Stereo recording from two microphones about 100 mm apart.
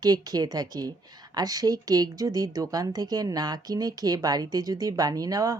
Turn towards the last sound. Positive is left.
turn(degrees=-35)  # may be behind; listen again after turning